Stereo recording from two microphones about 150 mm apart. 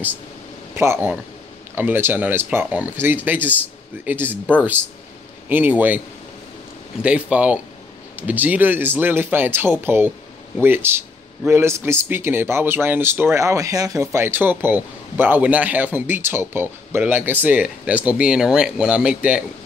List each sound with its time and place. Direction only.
0.7 s speech: 15° right (ahead or behind)
5.5 s speech: 10° right (ahead or behind)
7.0 s speech: 10° right (ahead or behind)